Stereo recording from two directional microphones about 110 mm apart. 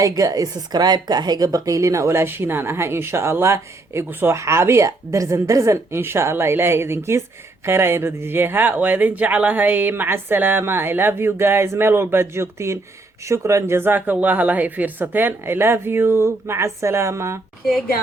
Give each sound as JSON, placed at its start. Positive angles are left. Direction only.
{"t": 0.0, "sound": "a woman's voice", "side_deg": -30}